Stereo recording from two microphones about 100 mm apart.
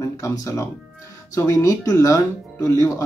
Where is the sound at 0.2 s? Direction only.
30° left (ahead or behind).